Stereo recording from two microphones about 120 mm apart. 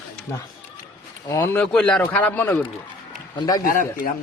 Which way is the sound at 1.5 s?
10° left (ahead or behind).